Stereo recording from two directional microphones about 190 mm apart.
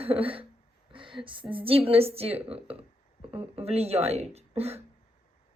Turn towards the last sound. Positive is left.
turn(degrees=-35)  # may be behind; listen again after turning